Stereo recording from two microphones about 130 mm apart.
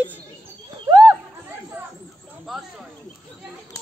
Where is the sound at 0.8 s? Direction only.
30° right (ahead or behind).